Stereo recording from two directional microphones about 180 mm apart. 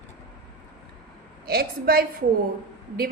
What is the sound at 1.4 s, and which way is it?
Speech, 55° right (ahead or behind).